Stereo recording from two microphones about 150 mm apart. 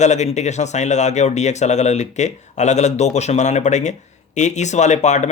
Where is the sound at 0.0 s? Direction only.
50° left (ahead or behind).